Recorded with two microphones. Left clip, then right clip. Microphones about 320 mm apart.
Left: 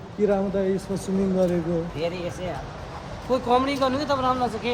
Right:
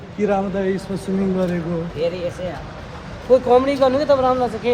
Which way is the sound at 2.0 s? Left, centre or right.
Left.